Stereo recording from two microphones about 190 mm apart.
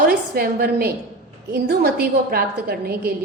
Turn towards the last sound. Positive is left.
turn(degrees=-55)  # may be behind; listen again after turning